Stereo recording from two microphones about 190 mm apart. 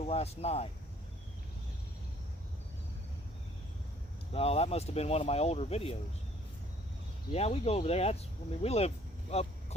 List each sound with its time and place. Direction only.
0.0 s speech: 35° left (ahead or behind)
4.3 s speech: 30° left (ahead or behind)
7.3 s speech: 30° left (ahead or behind)
9.3 s a sound: 35° left (ahead or behind)